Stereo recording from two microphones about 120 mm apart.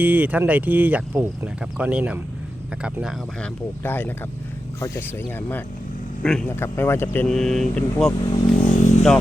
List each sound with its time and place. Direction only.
0.0 s speech: 15° right (ahead or behind)
3.4 s speech: 15° left (ahead or behind)
6.2 s speech: 5° left (ahead or behind)
6.6 s speech: 20° left (ahead or behind)
7.3 s speech: 5° left (ahead or behind)
8.2 s speech: 50° left (ahead or behind)
8.6 s vehicle: 90° left